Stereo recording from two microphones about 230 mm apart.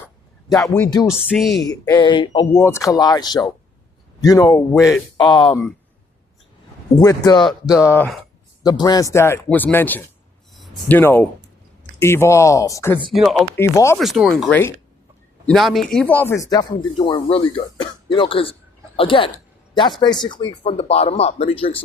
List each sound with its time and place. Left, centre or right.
0.4 s speech: centre
6.9 s speech: centre
8.6 s speech: centre
13.1 s speech: centre
13.6 s speech: centre
14.0 s speech: centre; by 21.7 s left